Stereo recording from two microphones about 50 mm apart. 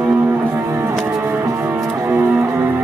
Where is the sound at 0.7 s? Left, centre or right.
Right.